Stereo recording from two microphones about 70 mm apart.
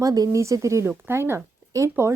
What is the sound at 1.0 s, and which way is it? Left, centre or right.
Speech, right.